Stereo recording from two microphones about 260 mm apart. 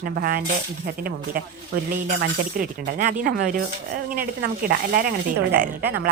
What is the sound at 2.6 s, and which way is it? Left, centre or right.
Speech, right.